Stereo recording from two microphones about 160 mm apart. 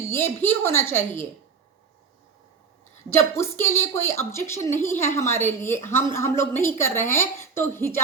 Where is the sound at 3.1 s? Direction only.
15° left (ahead or behind).